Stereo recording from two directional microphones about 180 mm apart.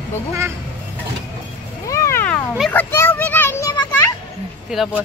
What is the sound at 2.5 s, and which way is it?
Children playing, 10° left (ahead or behind).